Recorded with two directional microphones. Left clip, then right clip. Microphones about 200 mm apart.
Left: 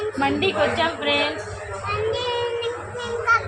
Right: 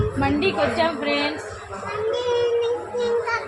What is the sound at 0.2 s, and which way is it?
Speech, 5° right (ahead or behind).